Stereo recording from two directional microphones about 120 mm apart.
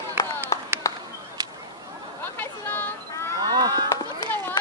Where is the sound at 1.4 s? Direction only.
35° right (ahead or behind).